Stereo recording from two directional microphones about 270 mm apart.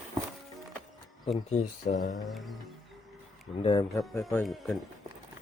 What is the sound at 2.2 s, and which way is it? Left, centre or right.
Speech, centre.